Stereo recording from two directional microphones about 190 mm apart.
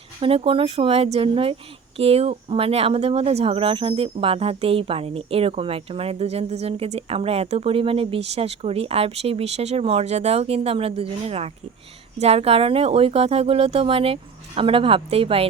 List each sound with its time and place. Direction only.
0.2 s speech: 30° right (ahead or behind)